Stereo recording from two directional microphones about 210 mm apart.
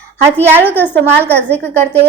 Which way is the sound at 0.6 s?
10° left (ahead or behind).